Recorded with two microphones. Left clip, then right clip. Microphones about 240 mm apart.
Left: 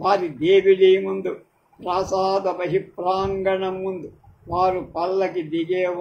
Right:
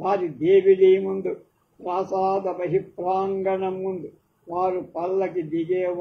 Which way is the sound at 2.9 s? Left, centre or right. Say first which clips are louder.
Left 2 dB; left.